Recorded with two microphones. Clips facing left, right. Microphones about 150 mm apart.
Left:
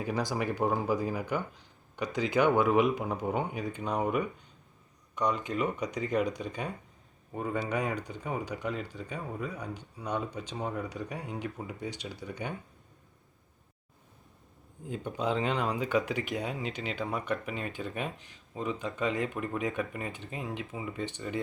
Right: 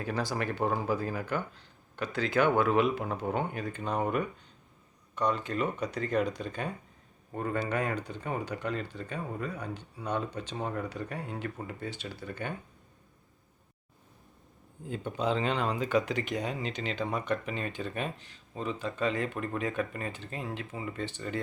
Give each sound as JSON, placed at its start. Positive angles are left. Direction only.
{"t": 0.0, "sound": "speech", "side_deg": 15}
{"t": 14.8, "sound": "speech", "side_deg": 10}